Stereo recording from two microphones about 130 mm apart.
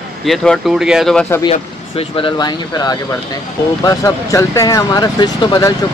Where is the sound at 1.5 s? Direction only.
45° left (ahead or behind).